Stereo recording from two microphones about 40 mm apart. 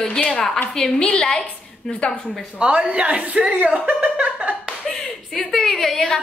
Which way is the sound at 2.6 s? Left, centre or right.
Right.